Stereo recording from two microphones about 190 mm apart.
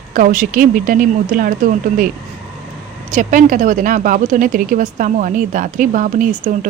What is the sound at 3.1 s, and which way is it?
Speech, 40° right (ahead or behind).